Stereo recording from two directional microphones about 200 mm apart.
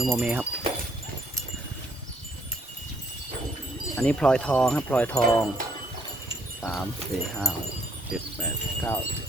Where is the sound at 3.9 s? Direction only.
5° left (ahead or behind).